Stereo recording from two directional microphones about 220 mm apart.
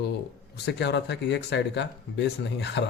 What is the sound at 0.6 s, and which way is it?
Speech, 50° left (ahead or behind).